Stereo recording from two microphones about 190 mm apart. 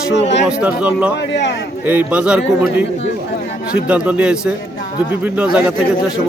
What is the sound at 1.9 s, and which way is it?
Speech, 10° right (ahead or behind).